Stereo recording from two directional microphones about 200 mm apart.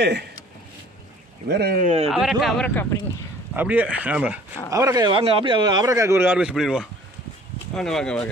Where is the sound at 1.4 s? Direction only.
50° right (ahead or behind); by 2.1 s 35° right (ahead or behind).